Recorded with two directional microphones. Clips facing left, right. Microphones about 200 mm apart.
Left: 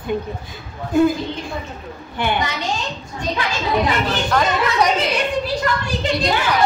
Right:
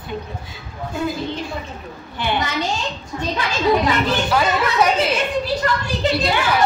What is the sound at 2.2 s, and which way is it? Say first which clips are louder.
Speech: left 2 dB; 50° left (ahead or behind).